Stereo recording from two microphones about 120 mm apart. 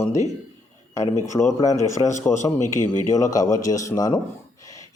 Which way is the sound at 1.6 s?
30° left (ahead or behind).